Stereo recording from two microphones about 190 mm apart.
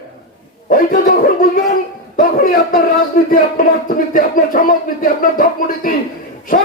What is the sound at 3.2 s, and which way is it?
Speech, 45° left (ahead or behind).